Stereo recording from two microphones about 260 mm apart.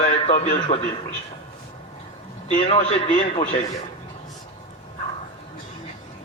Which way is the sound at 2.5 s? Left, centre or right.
Left.